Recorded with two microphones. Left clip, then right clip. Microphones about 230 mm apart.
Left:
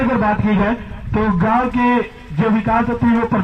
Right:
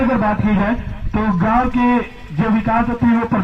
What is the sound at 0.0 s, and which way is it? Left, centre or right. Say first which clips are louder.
A man's voice: even; left.